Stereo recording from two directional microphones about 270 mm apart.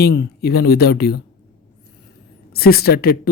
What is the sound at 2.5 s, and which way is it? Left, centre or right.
Speech, left.